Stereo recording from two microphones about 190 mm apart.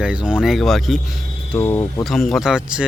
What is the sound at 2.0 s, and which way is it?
Speech, centre (ahead or behind).